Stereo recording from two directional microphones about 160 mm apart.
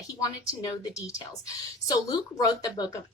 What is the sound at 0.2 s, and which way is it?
A woman's voice, 20° left (ahead or behind).